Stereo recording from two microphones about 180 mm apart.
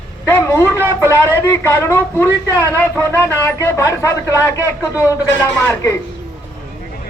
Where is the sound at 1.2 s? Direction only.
15° left (ahead or behind).